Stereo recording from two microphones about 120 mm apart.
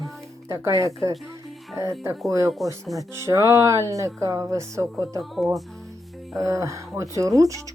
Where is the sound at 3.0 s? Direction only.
25° right (ahead or behind).